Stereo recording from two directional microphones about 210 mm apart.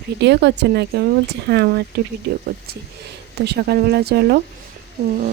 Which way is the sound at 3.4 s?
50° right (ahead or behind).